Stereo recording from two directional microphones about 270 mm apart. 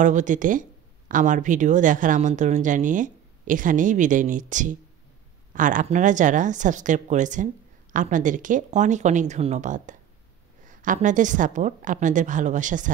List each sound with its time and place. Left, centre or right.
0.0 s speech: right